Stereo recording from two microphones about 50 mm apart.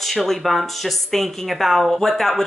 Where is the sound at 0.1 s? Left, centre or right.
Centre.